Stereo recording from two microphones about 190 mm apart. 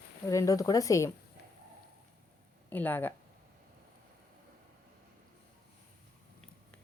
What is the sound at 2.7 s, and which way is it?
Speech, 10° left (ahead or behind).